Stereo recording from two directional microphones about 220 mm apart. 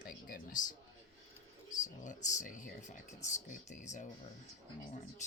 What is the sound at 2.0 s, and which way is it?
Speech, 35° left (ahead or behind).